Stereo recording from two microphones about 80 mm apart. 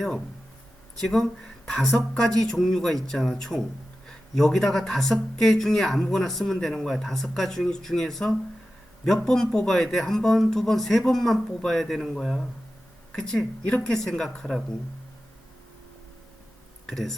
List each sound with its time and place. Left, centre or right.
0.9 s speech: centre
16.8 s speech: centre